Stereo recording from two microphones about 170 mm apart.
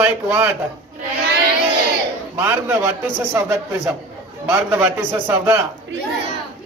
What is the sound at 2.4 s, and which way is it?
A man's voice, 15° right (ahead or behind).